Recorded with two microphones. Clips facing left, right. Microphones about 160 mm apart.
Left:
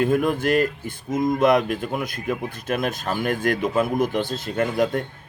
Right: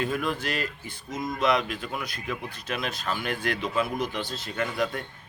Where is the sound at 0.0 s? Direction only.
50° left (ahead or behind).